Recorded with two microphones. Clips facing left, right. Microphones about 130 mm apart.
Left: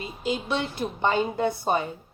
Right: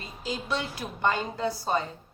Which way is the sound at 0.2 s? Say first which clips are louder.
Left 6 dB; 35° right (ahead or behind).